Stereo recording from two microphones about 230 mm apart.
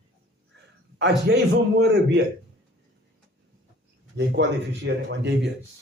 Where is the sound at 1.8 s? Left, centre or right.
Right.